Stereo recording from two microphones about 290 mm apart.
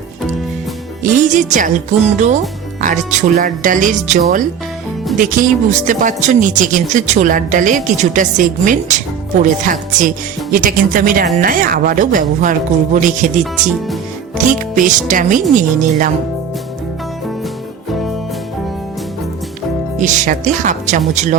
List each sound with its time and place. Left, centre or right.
1.0 s speech: right
20.0 s speech: right